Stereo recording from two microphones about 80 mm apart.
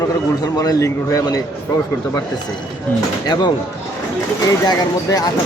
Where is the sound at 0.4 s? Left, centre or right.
Left.